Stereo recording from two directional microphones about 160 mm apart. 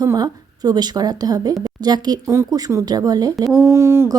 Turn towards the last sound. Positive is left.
turn(degrees=-15)  # may be behind; listen again after turning